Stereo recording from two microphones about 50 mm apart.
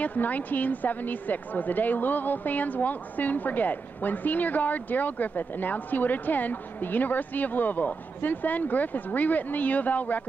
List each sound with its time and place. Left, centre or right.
0.0 s a woman's voice: left